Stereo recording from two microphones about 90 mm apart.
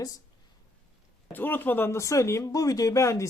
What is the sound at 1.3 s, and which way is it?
Speech, 20° left (ahead or behind).